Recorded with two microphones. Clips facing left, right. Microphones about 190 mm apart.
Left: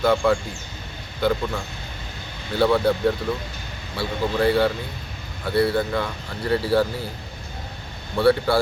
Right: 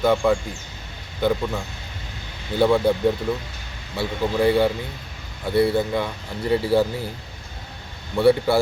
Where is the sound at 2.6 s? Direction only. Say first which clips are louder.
Right 1 dB; 15° right (ahead or behind).